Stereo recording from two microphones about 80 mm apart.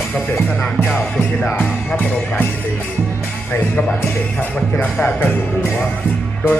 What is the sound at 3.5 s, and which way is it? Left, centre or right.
Speech, centre.